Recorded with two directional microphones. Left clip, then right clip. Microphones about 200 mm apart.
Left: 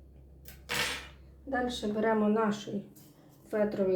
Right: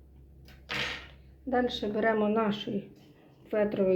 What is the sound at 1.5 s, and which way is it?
A woman's voice, 40° right (ahead or behind).